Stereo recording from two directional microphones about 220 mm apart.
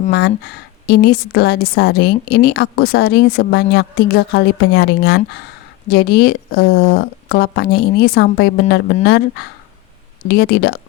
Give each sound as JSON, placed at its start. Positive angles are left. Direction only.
{"t": 0.1, "sound": "a woman's voice", "side_deg": 45}